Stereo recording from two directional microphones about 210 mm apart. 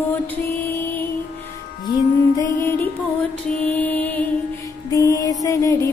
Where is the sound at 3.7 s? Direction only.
10° left (ahead or behind).